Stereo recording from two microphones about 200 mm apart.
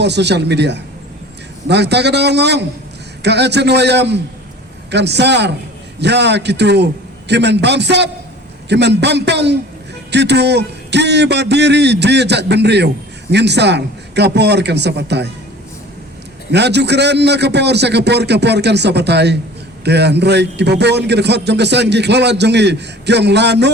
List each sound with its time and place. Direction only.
0.0 s a man's voice: 60° right (ahead or behind)
16.5 s a man's voice: 60° right (ahead or behind)